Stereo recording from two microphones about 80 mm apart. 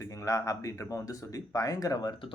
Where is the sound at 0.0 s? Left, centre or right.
Left.